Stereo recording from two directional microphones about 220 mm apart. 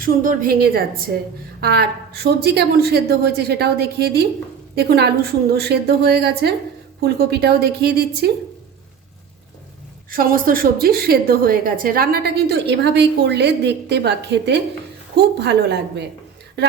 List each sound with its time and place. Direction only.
0.0 s a woman's voice: 40° right (ahead or behind)
10.1 s a woman's voice: 40° right (ahead or behind)